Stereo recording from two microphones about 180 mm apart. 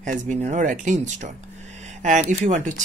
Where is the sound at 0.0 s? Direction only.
45° right (ahead or behind).